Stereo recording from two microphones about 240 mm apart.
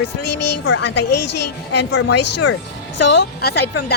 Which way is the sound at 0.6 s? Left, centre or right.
Left.